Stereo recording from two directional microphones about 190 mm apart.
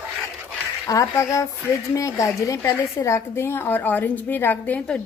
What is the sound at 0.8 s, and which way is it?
Speech, 15° left (ahead or behind).